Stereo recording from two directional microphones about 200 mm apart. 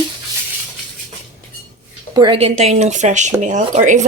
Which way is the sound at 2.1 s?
25° right (ahead or behind).